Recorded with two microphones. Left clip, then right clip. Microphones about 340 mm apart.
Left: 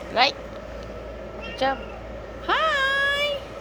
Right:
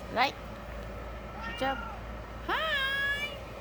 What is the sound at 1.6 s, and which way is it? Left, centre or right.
Speech, centre.